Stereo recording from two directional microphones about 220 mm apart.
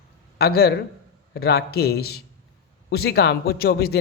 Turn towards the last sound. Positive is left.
turn(degrees=45)  # may be behind; listen again after turning